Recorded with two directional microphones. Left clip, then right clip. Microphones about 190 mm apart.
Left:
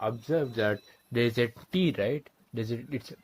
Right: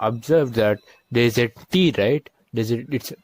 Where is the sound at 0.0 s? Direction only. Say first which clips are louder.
Right 10 dB; 50° right (ahead or behind).